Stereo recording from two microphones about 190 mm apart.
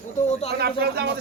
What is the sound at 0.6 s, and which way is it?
Speech, 55° right (ahead or behind).